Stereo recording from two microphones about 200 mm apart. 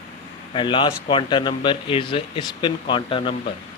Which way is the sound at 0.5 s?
25° left (ahead or behind).